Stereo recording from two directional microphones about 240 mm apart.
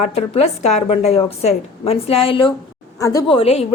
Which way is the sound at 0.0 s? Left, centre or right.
Left.